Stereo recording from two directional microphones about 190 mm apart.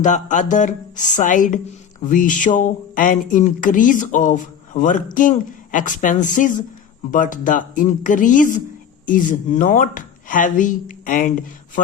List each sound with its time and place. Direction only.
0.0 s music: 40° left (ahead or behind)
2.0 s speech: 45° left (ahead or behind)
6.2 s music: 40° left (ahead or behind)
7.1 s speech: 45° left (ahead or behind)